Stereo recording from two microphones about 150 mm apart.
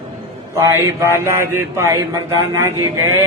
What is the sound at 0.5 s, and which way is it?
A man's voice, 15° right (ahead or behind).